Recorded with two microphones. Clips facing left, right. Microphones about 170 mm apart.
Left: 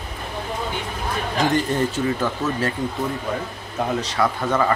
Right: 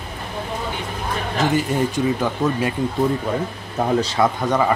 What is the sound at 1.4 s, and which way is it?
Speech, 10° right (ahead or behind).